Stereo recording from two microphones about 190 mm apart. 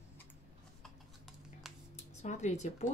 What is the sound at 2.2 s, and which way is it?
Speech, 35° left (ahead or behind).